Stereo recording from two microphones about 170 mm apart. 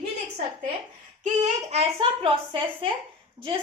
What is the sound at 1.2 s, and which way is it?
A woman's voice, 45° right (ahead or behind).